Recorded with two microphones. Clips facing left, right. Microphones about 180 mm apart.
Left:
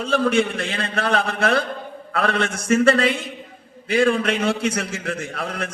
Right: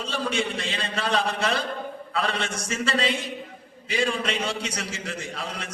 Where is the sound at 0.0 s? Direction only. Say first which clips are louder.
Left 8 dB; 55° left (ahead or behind).